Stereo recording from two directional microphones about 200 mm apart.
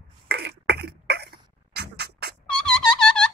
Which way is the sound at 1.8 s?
55° right (ahead or behind).